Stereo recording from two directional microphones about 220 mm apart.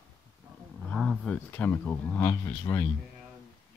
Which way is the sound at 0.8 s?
5° left (ahead or behind).